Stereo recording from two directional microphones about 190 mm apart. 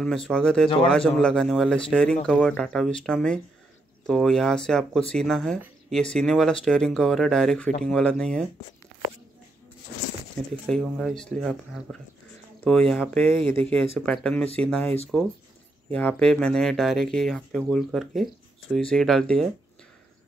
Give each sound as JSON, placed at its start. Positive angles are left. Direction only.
{"t": 0.0, "sound": "speech", "side_deg": 5}
{"t": 10.7, "sound": "speech", "side_deg": 0}